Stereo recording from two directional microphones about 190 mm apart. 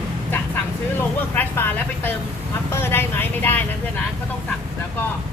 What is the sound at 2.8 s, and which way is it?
Speech, 10° left (ahead or behind).